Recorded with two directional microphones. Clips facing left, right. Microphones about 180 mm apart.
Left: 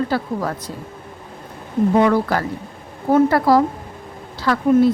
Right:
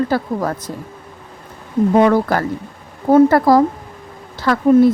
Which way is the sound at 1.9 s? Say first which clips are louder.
Right 3 dB; 50° right (ahead or behind).